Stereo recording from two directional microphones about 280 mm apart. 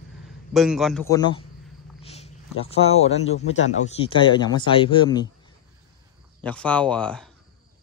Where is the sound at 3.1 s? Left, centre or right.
Left.